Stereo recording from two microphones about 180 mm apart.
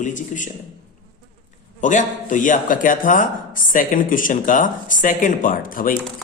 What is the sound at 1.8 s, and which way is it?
Speech, 45° left (ahead or behind).